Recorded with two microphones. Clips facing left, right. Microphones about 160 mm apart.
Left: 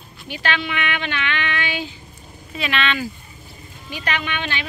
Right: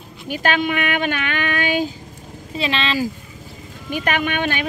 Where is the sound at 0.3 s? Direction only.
45° right (ahead or behind).